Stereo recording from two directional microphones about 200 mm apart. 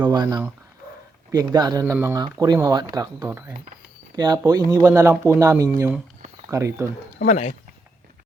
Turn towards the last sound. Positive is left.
turn(degrees=35)  # may be behind; listen again after turning